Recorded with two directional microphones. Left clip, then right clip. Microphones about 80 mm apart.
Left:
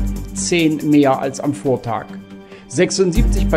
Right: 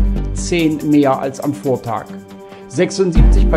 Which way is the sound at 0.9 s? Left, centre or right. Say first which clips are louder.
Right 1 dB; left.